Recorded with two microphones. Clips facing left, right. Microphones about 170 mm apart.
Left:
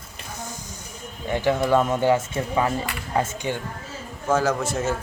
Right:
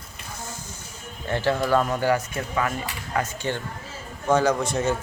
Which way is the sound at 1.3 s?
15° left (ahead or behind).